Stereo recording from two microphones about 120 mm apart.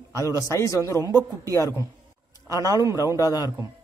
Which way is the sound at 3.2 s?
30° left (ahead or behind).